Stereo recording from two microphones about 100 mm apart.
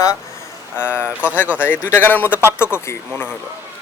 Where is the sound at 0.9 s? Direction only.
15° right (ahead or behind).